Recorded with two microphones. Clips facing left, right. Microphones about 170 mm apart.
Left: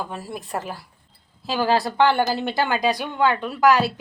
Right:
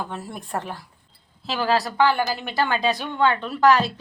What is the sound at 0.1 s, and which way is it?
Speech, 5° left (ahead or behind).